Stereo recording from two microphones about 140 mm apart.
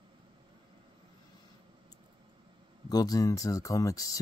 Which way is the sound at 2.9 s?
25° left (ahead or behind).